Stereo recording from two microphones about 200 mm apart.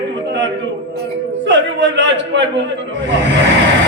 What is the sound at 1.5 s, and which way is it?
Speech, 65° right (ahead or behind).